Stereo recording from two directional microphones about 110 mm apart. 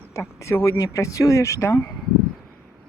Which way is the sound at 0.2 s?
25° left (ahead or behind).